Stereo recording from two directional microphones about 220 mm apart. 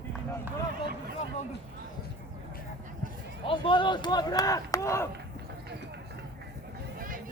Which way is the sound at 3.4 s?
25° left (ahead or behind).